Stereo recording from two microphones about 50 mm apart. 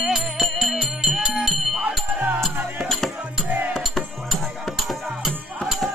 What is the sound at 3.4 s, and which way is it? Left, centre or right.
Music, right.